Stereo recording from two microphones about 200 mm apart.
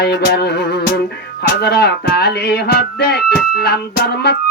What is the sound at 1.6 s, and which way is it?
Music, 50° left (ahead or behind).